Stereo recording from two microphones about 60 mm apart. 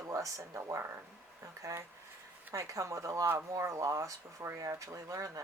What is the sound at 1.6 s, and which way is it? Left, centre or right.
Speech, right.